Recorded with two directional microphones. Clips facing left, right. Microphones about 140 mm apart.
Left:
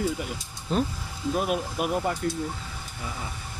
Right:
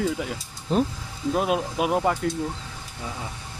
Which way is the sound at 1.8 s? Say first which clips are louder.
Right 5 dB; 90° right.